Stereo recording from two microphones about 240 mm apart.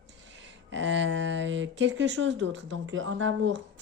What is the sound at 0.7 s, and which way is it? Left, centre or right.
Speech, right.